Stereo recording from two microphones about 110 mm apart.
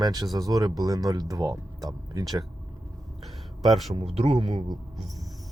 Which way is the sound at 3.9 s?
65° right (ahead or behind).